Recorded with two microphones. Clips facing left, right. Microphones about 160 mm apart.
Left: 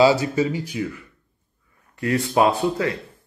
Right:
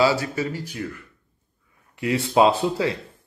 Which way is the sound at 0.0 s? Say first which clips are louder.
Left 4 dB; 20° left (ahead or behind).